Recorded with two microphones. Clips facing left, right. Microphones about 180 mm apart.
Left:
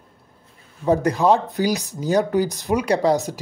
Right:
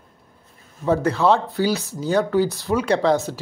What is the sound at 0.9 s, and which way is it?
A man's voice, 15° left (ahead or behind).